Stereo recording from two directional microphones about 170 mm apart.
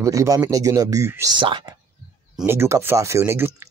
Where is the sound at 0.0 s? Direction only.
20° right (ahead or behind).